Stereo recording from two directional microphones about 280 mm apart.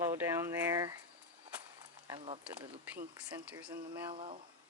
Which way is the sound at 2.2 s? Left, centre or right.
Right.